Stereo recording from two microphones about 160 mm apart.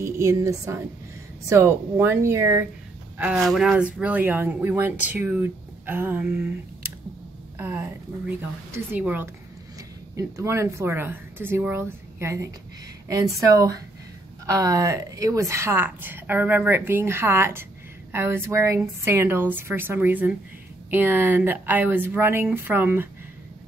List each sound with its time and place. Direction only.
0.0 s a woman's voice: 20° right (ahead or behind)
3.2 s speech: 5° right (ahead or behind)
7.5 s speech: 15° right (ahead or behind)